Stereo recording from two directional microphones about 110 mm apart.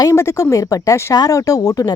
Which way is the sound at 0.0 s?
30° left (ahead or behind).